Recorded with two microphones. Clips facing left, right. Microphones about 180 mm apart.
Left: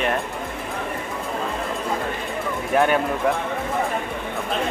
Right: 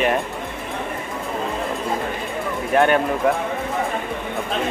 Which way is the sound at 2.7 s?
Centre (ahead or behind).